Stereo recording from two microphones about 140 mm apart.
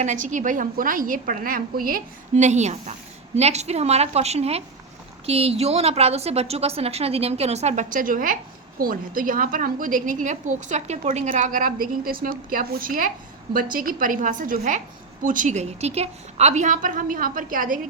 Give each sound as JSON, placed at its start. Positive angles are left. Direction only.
{"t": 0.0, "sound": "a woman's voice", "side_deg": -60}
{"t": 2.4, "sound": "a woman's voice", "side_deg": -55}